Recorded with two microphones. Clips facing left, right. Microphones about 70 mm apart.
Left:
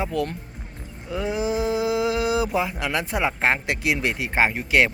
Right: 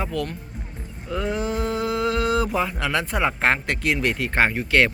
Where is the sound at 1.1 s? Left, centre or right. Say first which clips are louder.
Left 1 dB; centre.